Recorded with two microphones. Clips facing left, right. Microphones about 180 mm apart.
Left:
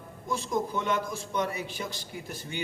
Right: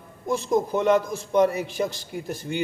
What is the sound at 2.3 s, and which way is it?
Speech, 45° right (ahead or behind).